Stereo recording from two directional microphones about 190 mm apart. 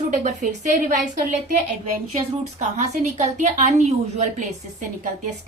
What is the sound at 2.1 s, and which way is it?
A woman's voice, 35° right (ahead or behind).